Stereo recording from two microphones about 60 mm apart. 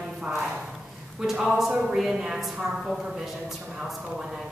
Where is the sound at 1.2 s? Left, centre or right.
Centre.